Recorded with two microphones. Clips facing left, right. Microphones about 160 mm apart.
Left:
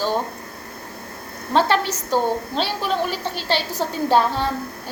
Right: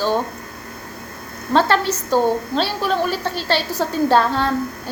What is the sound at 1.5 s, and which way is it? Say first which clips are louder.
A woman's voice: right 2 dB; 15° left (ahead or behind).